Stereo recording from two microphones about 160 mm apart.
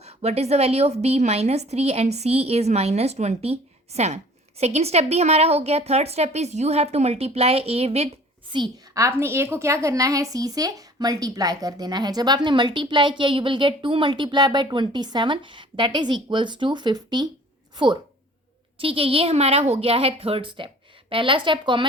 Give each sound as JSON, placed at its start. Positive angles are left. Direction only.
{"t": 0.0, "sound": "a woman's voice", "side_deg": -40}
{"t": 8.5, "sound": "a woman's voice", "side_deg": -30}
{"t": 9.0, "sound": "a woman's voice", "side_deg": -15}
{"t": 18.8, "sound": "a woman's voice", "side_deg": -35}